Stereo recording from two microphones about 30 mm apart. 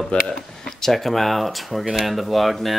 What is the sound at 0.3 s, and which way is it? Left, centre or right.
Speech, centre.